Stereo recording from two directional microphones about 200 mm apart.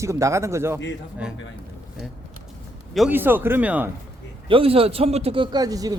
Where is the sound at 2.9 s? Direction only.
5° right (ahead or behind).